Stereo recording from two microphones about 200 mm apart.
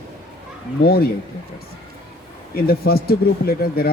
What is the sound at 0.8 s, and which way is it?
Speech, 50° left (ahead or behind).